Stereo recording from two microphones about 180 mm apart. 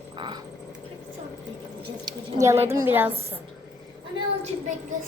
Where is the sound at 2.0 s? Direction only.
20° right (ahead or behind).